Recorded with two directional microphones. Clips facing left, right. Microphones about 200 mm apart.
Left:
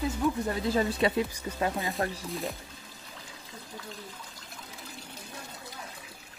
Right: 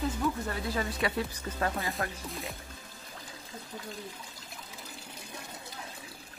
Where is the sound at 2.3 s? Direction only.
Centre (ahead or behind).